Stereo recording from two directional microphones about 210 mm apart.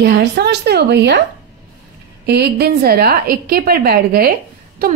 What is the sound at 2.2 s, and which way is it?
Speech, 50° right (ahead or behind).